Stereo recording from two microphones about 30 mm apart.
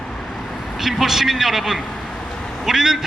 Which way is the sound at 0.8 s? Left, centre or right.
Centre.